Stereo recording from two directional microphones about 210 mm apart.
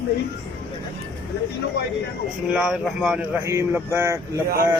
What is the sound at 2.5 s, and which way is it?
Speech, centre (ahead or behind).